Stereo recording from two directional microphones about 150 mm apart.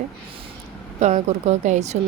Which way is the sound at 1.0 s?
50° right (ahead or behind).